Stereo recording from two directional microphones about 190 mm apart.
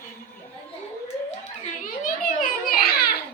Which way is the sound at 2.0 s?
45° left (ahead or behind).